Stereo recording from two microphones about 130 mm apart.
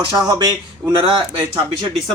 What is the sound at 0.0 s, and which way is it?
Speech, 35° right (ahead or behind).